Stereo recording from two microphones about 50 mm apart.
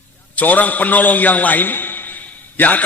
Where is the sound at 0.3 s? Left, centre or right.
Left.